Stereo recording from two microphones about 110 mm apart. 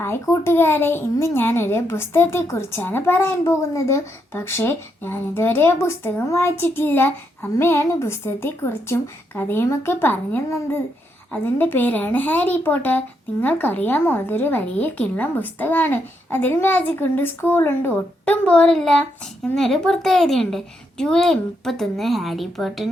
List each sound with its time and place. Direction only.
0.0 s a woman's voice: 20° left (ahead or behind); by 22.9 s centre (ahead or behind)